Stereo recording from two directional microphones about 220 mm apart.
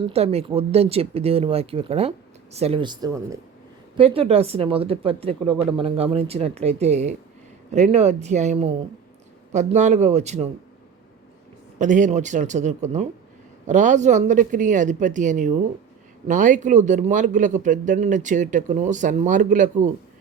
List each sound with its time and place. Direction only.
0.0 s speech: 25° right (ahead or behind)
11.8 s speech: 35° right (ahead or behind)